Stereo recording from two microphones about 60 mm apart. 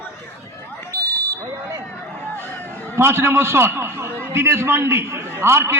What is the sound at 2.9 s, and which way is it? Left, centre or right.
A man's voice, right.